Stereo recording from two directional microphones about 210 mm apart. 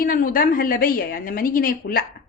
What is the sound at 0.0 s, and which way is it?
A woman's voice, 40° left (ahead or behind).